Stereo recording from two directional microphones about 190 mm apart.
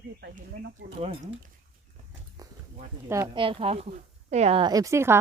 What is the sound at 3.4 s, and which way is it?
A woman's voice, 30° right (ahead or behind).